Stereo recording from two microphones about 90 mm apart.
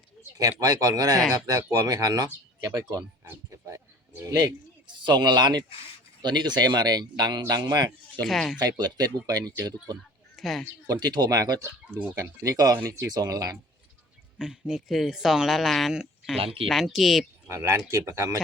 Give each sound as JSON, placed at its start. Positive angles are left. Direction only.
{"t": 0.6, "sound": "speech", "side_deg": -40}
{"t": 5.0, "sound": "speech", "side_deg": -55}
{"t": 7.4, "sound": "speech", "side_deg": -45}
{"t": 8.2, "sound": "speech", "side_deg": 5}
{"t": 8.8, "sound": "speech", "side_deg": -50}
{"t": 10.3, "sound": "a sound", "side_deg": 0}
{"t": 10.8, "sound": "speech", "side_deg": -45}
{"t": 11.6, "sound": "speech", "side_deg": -20}
{"t": 12.1, "sound": "speech", "side_deg": -40}
{"t": 14.3, "sound": "speech", "side_deg": -5}
{"t": 16.4, "sound": "speech", "side_deg": -90}
{"t": 16.6, "sound": "speech", "side_deg": 0}
{"t": 17.5, "sound": "speech", "side_deg": -30}